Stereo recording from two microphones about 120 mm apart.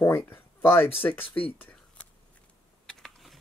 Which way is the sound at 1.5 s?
15° left (ahead or behind).